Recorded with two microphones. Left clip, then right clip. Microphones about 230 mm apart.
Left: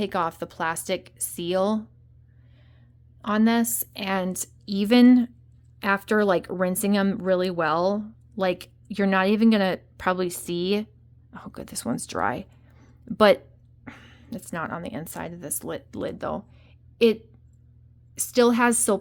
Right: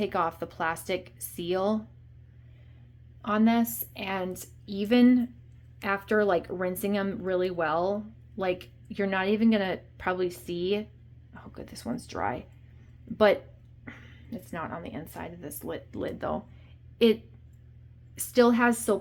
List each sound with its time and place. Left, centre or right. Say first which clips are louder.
0.0 s speech: left 2 dB; left
3.2 s a woman's voice: left 3 dB; left